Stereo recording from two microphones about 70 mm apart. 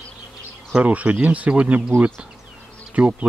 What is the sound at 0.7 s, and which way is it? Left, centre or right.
Speech, centre.